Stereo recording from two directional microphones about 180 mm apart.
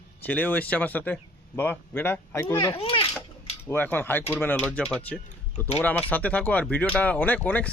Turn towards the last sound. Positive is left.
turn(degrees=10)  # may be behind; listen again after turning